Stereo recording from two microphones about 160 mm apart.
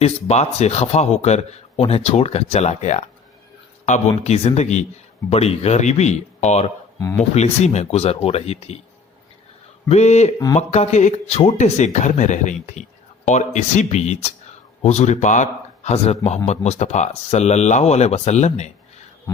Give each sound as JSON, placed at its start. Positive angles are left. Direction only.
{"t": 0.0, "sound": "a man's voice", "side_deg": 45}
{"t": 9.9, "sound": "speech", "side_deg": 45}